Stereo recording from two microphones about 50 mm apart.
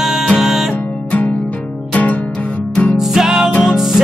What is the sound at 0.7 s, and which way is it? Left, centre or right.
Music, left.